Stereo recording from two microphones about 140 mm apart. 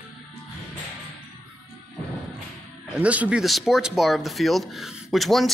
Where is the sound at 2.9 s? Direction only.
10° right (ahead or behind).